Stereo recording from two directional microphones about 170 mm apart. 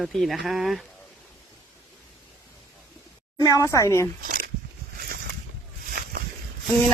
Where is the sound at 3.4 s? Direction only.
20° left (ahead or behind).